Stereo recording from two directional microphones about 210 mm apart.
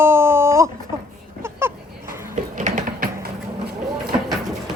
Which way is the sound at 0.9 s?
10° right (ahead or behind).